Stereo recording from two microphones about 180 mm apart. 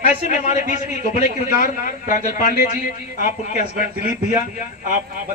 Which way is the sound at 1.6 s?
50° left (ahead or behind).